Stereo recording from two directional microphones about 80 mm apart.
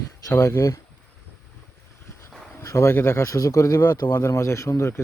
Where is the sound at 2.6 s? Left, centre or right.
Left.